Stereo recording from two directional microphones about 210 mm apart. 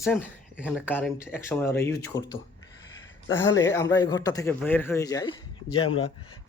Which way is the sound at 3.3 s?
15° left (ahead or behind).